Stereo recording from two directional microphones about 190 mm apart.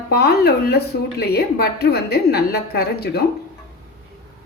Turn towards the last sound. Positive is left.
turn(degrees=55)  # may be behind; listen again after turning